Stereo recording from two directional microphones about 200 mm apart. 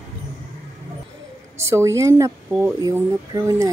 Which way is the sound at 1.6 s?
15° right (ahead or behind).